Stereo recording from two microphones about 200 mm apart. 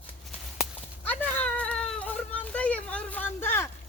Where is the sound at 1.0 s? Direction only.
10° left (ahead or behind).